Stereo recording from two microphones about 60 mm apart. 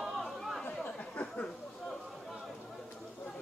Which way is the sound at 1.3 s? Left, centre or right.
Centre.